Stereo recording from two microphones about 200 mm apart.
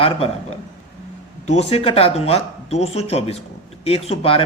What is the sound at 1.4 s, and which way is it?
A man's voice, 30° left (ahead or behind).